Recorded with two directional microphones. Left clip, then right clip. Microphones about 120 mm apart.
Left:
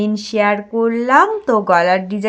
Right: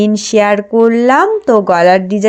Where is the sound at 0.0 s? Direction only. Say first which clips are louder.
Right 6 dB; 45° right (ahead or behind).